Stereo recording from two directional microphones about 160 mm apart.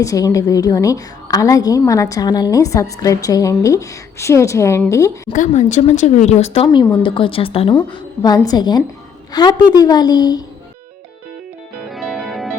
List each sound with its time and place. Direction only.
0.0 s a woman's voice: 20° left (ahead or behind)
5.3 s speech: 50° left (ahead or behind)
6.7 s a woman's voice: 25° left (ahead or behind)
7.9 s a woman's voice: 25° left (ahead or behind)
11.9 s music: centre (ahead or behind)